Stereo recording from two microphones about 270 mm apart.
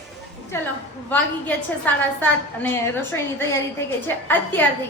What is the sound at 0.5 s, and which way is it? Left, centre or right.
A woman's voice, centre.